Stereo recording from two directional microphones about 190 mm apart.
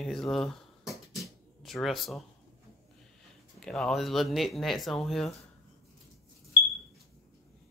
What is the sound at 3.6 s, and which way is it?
Speech, 5° left (ahead or behind).